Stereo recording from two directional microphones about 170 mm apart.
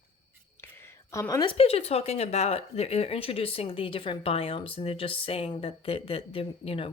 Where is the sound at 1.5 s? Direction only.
35° left (ahead or behind).